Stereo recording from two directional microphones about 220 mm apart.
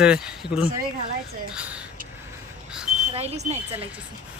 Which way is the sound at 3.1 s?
30° right (ahead or behind).